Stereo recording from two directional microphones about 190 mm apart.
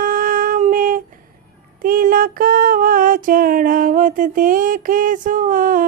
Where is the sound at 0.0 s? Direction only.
45° right (ahead or behind).